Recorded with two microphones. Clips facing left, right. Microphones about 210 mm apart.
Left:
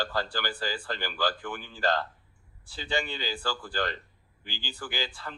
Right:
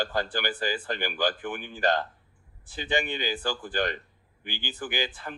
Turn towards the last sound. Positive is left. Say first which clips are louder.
# right 4 dB
turn(degrees=-15)  # may be behind; listen again after turning